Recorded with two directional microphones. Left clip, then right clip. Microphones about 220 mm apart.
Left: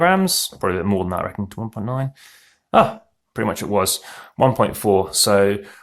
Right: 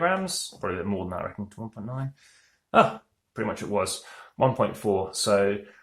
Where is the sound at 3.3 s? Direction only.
40° left (ahead or behind).